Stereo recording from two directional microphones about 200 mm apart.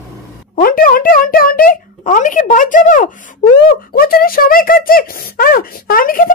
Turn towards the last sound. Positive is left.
turn(degrees=45)  # may be behind; listen again after turning